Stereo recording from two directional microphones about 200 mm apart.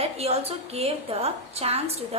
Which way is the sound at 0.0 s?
30° right (ahead or behind).